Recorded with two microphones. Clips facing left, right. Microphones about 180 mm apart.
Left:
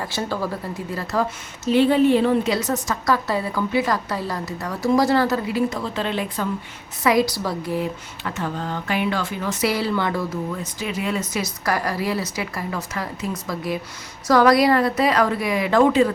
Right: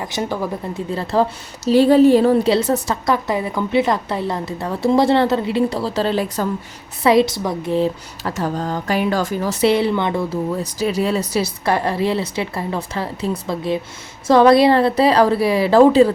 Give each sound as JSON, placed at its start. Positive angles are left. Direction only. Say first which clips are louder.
{"t": 0.0, "sound": "speech", "louder": "right 3 dB", "side_deg": -15}
{"t": 0.9, "sound": "a woman's voice", "louder": "right 6 dB", "side_deg": -30}
{"t": 8.4, "sound": "speech", "louder": "right 5 dB", "side_deg": -40}